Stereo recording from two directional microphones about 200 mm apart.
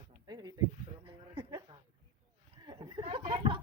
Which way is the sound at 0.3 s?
20° right (ahead or behind).